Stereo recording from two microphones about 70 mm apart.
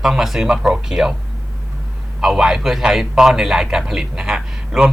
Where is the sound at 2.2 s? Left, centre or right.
Centre.